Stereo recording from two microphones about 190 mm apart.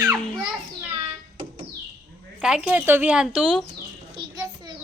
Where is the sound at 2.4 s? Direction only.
5° right (ahead or behind).